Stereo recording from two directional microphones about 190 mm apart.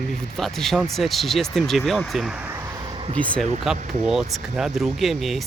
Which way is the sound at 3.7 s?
40° right (ahead or behind).